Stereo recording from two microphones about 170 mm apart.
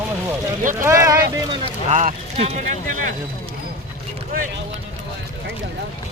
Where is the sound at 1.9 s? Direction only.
45° right (ahead or behind).